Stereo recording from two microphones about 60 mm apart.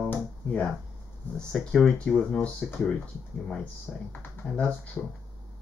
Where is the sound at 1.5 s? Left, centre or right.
Centre.